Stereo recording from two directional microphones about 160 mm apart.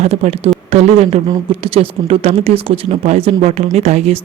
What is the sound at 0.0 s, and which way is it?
Speech, 40° right (ahead or behind).